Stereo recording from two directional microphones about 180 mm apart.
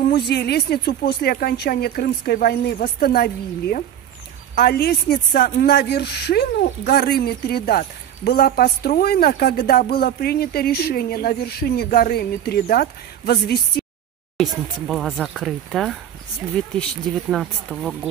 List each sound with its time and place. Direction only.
0.1 s speech: 65° left (ahead or behind)
14.3 s speech: centre (ahead or behind)